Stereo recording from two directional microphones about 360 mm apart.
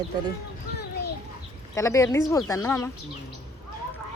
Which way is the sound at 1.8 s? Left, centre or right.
Centre.